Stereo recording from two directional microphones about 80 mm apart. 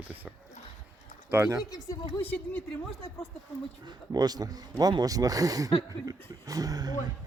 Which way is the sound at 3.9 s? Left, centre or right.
Right.